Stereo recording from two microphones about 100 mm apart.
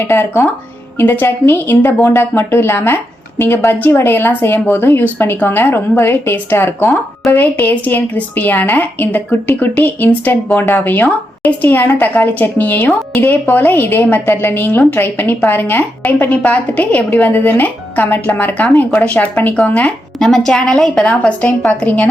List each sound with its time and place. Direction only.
0.0 s a woman's voice: 25° left (ahead or behind)
20.1 s a woman's voice: 5° left (ahead or behind)